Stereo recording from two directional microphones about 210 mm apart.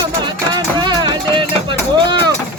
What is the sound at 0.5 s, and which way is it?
Music, 20° right (ahead or behind).